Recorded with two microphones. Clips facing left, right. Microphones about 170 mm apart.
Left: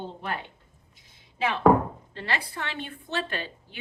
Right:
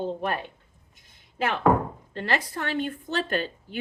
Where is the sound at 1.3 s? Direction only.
55° right (ahead or behind).